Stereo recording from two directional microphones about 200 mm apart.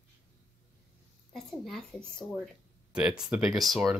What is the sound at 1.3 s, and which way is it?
A woman's voice, centre (ahead or behind).